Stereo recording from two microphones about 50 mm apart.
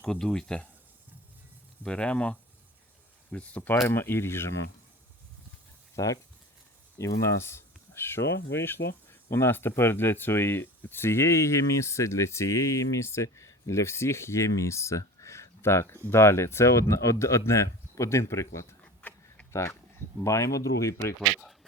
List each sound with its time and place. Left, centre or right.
0.0 s speech: centre
1.8 s speech: left
3.9 s speech: left
6.0 s speech: left
7.0 s speech: left
18.8 s a sound: left
20.2 s speech: left
21.2 s speech: centre